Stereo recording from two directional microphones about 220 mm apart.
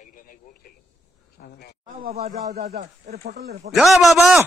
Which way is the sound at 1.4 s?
45° left (ahead or behind).